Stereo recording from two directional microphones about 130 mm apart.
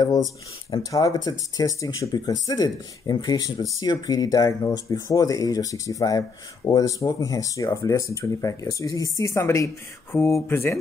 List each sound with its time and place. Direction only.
0.7 s speech: 30° left (ahead or behind)